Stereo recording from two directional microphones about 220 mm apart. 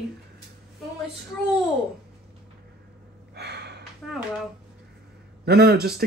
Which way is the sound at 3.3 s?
50° right (ahead or behind).